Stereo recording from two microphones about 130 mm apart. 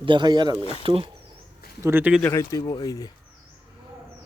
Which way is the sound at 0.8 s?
45° right (ahead or behind).